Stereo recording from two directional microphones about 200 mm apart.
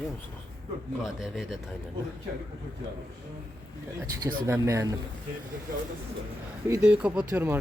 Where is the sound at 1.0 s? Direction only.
Centre (ahead or behind).